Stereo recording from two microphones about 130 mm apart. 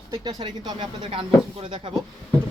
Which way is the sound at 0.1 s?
35° right (ahead or behind).